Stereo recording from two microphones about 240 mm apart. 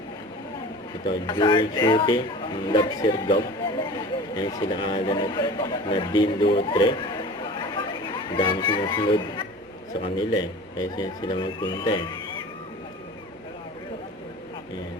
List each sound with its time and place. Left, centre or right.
1.3 s a man's voice: centre